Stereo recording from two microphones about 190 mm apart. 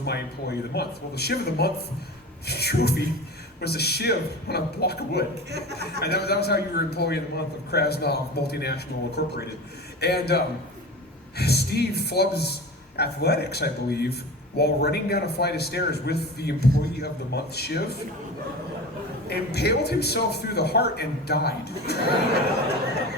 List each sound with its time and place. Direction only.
0.0 s a man's voice: 60° left (ahead or behind)
5.5 s speech: 60° right (ahead or behind)
6.0 s a man's voice: 60° left (ahead or behind)
19.3 s a man's voice: 60° left (ahead or behind)